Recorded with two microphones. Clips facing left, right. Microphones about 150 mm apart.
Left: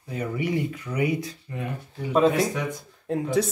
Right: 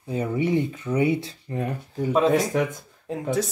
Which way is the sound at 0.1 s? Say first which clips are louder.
Right 4 dB; 25° right (ahead or behind).